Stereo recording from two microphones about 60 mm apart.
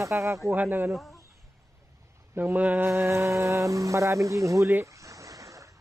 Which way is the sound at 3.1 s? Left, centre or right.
Right.